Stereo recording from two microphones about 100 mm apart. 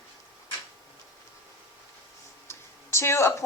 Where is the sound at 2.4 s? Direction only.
25° left (ahead or behind).